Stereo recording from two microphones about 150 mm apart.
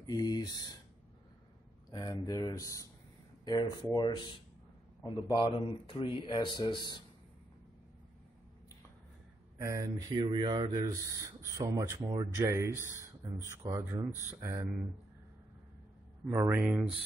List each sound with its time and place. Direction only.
0.0 s speech: 25° left (ahead or behind)
1.9 s speech: 25° left (ahead or behind)
9.6 s speech: 20° right (ahead or behind)
16.3 s speech: 15° right (ahead or behind)